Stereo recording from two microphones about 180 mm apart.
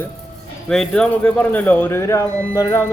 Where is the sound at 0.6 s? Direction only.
5° left (ahead or behind).